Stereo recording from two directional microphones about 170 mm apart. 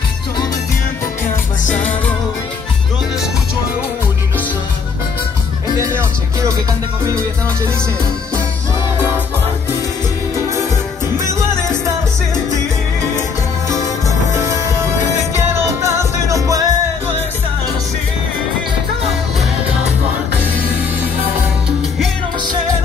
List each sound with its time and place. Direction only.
5.8 s music: 20° right (ahead or behind)
15.3 s music: 15° right (ahead or behind)